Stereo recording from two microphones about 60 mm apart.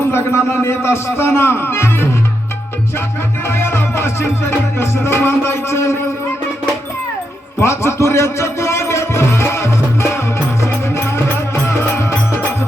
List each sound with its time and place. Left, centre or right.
0.1 s music: left
3.5 s music: left
7.6 s music: left
11.6 s music: left